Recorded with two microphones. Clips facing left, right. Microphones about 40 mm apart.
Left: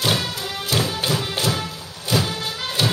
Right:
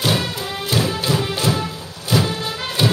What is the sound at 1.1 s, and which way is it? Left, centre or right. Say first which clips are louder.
Music: right 3 dB; centre.